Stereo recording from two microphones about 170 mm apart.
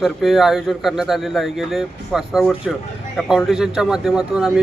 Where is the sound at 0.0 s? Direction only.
Centre (ahead or behind).